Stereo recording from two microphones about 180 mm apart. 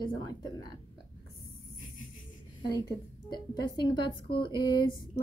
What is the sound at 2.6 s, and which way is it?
A woman's voice, 25° left (ahead or behind).